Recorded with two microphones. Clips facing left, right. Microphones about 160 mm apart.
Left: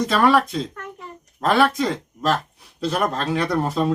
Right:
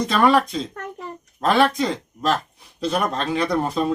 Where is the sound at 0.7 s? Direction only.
40° right (ahead or behind).